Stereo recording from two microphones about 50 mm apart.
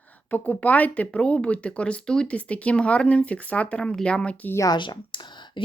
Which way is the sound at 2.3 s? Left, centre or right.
Left.